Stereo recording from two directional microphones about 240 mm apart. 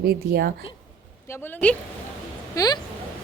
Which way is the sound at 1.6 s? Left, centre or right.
Centre.